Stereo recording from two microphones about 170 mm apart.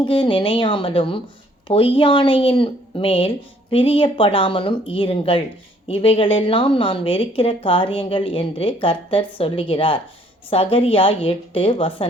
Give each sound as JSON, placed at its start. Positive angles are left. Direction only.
{"t": 0.0, "sound": "a woman's voice", "side_deg": 30}